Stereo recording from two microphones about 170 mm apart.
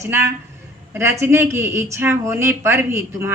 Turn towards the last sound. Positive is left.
turn(degrees=-15)  # may be behind; listen again after turning